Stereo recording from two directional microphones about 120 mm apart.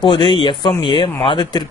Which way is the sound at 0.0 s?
45° left (ahead or behind).